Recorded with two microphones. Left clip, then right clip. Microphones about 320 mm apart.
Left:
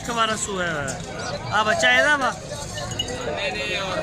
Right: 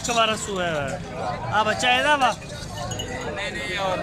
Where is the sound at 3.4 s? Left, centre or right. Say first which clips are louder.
Left 1 dB; centre.